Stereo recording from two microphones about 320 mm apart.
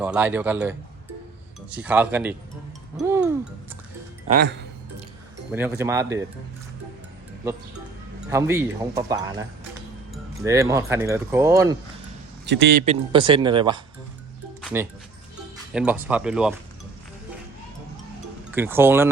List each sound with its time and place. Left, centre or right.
0.0 s speech: centre
3.0 s music: centre
4.3 s speech: right
5.5 s speech: centre
8.3 s speech: centre
12.5 s speech: right
12.8 s speech: centre
14.6 s music: centre
15.5 s speech: centre
18.5 s speech: centre